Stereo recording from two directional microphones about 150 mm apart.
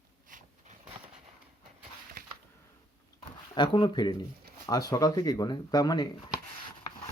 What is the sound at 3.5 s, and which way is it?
Speech, 30° left (ahead or behind).